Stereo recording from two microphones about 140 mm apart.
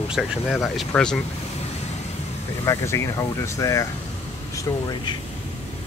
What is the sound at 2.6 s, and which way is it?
Speech, 20° left (ahead or behind).